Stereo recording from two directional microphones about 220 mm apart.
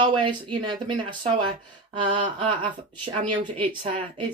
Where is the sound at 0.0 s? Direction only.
20° right (ahead or behind).